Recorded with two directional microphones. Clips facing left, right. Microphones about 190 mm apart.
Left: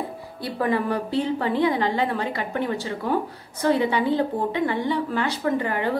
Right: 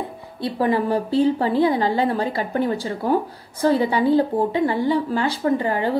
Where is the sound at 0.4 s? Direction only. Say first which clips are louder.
Right 3 dB; 30° right (ahead or behind).